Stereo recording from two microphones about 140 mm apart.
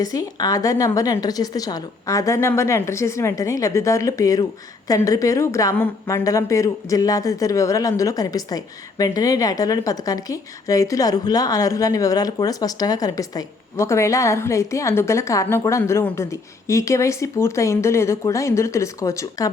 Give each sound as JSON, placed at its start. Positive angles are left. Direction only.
{"t": 0.0, "sound": "speech", "side_deg": 25}